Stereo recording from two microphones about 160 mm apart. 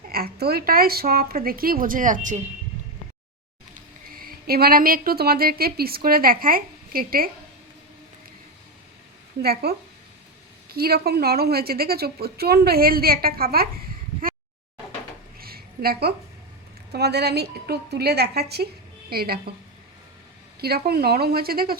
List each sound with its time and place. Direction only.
0.1 s a woman's voice: 75° right (ahead or behind); by 2.4 s 55° right (ahead or behind)
3.8 s speech: 65° right (ahead or behind)
9.4 s a woman's voice: 75° right (ahead or behind)
15.4 s a sound: 70° right (ahead or behind)
16.9 s a woman's voice: 90° right
19.1 s a woman's voice: 70° right (ahead or behind)
20.6 s a woman's voice: 75° right (ahead or behind)